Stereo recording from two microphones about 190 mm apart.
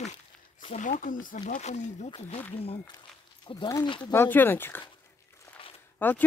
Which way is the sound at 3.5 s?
20° left (ahead or behind).